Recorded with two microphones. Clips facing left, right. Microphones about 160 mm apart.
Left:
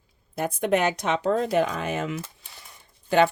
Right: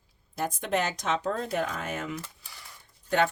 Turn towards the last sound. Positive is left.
turn(degrees=90)